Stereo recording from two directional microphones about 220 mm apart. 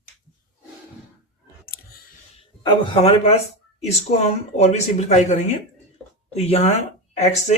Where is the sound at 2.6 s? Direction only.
20° left (ahead or behind).